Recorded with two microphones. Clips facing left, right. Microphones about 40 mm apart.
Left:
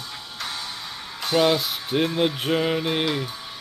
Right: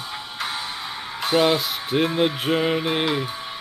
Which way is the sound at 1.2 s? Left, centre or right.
Centre.